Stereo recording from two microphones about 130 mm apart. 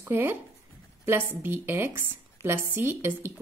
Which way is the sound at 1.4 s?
15° right (ahead or behind).